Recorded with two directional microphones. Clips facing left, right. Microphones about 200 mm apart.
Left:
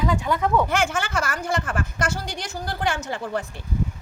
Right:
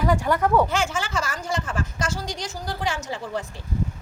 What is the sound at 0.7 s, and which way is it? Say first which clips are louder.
Speech: left 2 dB; 55° left (ahead or behind).